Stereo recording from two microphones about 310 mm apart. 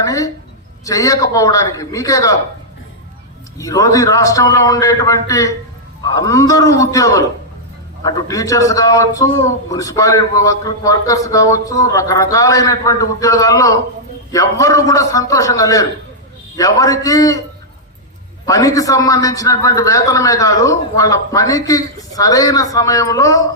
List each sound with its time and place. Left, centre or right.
0.0 s a sound: centre
0.9 s a man's voice: centre
3.6 s a man's voice: centre
18.4 s a man's voice: centre